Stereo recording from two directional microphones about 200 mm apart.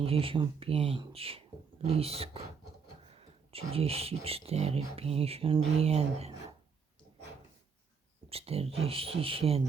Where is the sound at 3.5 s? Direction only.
30° right (ahead or behind).